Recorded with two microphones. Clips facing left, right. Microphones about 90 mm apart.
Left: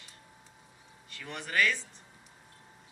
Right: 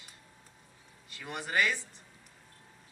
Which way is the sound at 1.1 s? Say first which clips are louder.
Even; 10° right (ahead or behind).